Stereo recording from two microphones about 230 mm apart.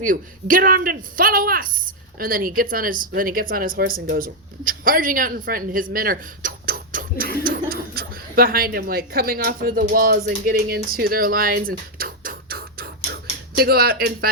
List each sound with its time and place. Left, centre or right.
0.0 s a woman's voice: right